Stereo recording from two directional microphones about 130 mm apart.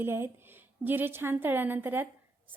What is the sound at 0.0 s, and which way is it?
A woman's voice, 15° right (ahead or behind).